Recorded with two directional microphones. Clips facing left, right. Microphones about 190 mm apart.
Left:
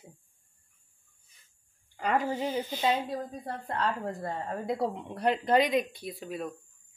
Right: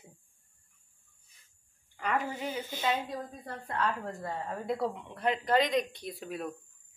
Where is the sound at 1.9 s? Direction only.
35° left (ahead or behind).